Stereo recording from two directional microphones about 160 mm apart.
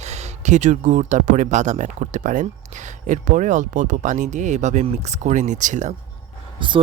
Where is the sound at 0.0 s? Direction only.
45° right (ahead or behind).